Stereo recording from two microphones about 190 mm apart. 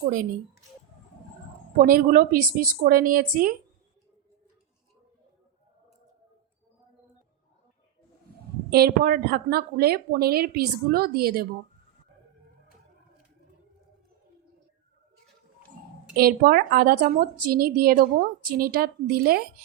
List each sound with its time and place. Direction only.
0.0 s speech: 45° right (ahead or behind)
1.8 s speech: 45° right (ahead or behind)
8.7 s speech: 55° right (ahead or behind)
16.1 s speech: 50° right (ahead or behind)